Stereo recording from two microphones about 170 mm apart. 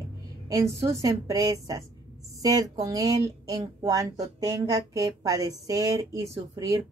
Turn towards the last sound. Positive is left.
turn(degrees=-20)  # may be behind; listen again after turning